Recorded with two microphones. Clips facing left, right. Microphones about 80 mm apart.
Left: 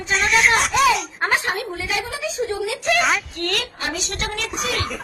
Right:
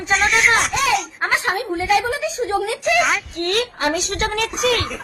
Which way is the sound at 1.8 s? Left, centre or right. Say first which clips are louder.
Right 13 dB; right.